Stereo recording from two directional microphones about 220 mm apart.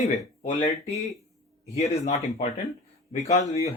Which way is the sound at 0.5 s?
30° left (ahead or behind).